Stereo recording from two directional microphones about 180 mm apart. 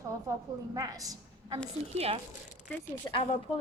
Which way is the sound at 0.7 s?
20° right (ahead or behind).